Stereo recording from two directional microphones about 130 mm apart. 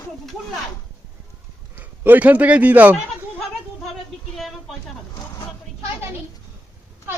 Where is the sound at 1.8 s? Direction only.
15° right (ahead or behind).